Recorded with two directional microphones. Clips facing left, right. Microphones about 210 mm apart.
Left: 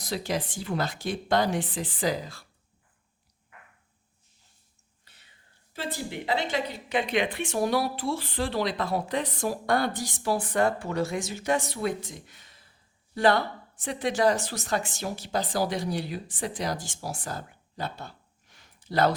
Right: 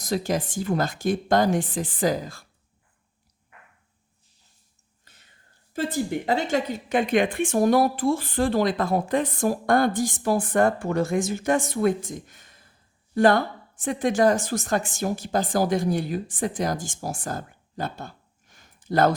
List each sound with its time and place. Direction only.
0.0 s speech: 45° right (ahead or behind)
5.0 s whispering: 45° right (ahead or behind)
5.7 s a woman's voice: 45° right (ahead or behind)